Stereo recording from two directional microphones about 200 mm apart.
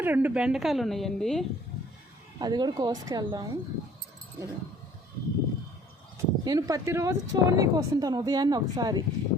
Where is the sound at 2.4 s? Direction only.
20° right (ahead or behind).